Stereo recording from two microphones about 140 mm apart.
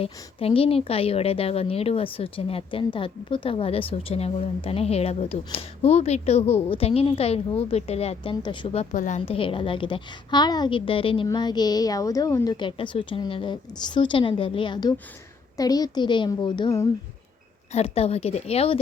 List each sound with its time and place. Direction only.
0.0 s a woman's voice: 45° left (ahead or behind); by 9.2 s 65° left (ahead or behind)
9.2 s a woman's voice: 40° left (ahead or behind); by 12.5 s 25° left (ahead or behind)
12.5 s a woman's voice: 35° left (ahead or behind)
17.7 s a woman's voice: 50° left (ahead or behind)